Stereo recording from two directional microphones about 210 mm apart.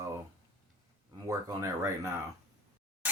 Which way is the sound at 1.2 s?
15° right (ahead or behind).